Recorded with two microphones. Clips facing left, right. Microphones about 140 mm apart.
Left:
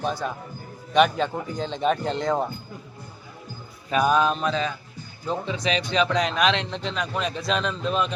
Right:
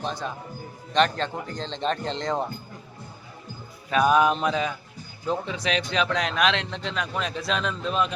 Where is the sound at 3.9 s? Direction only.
Centre (ahead or behind).